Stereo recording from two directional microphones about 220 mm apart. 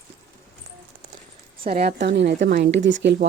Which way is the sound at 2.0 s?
50° right (ahead or behind).